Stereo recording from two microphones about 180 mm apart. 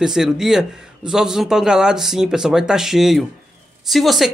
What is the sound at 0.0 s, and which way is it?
A man's voice, 5° right (ahead or behind).